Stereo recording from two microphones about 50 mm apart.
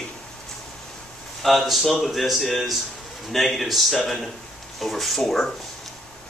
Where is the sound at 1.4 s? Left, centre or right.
Centre.